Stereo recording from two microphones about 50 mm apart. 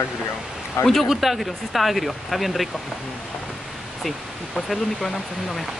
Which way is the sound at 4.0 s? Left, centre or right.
Centre.